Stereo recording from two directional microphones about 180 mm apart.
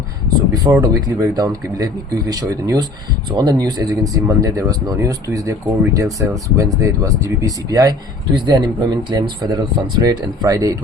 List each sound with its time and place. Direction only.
0.5 s speech: 20° right (ahead or behind)